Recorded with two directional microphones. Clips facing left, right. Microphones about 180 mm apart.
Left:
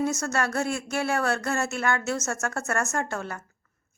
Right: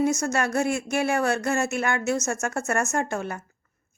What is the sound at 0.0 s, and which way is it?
A woman's voice, 15° right (ahead or behind).